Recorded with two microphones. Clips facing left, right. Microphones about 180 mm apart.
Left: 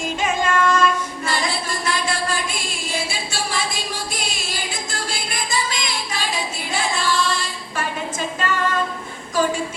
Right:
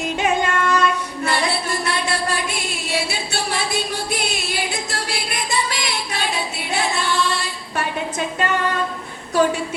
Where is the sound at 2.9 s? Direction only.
65° right (ahead or behind).